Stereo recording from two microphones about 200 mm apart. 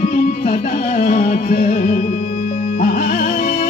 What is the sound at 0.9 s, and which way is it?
Music, 40° left (ahead or behind).